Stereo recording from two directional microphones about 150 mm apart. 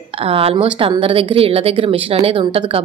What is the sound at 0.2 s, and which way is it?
A woman's voice, 40° right (ahead or behind).